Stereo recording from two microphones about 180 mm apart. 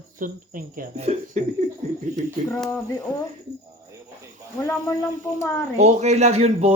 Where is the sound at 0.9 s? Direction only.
35° right (ahead or behind).